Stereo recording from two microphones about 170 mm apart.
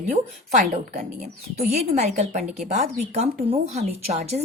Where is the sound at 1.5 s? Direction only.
40° right (ahead or behind).